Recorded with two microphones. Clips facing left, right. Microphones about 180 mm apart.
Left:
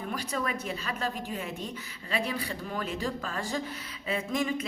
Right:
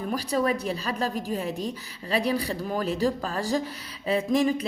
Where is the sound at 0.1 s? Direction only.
35° right (ahead or behind).